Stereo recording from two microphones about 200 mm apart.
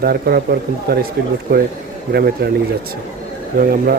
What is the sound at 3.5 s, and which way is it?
Speech, 45° right (ahead or behind).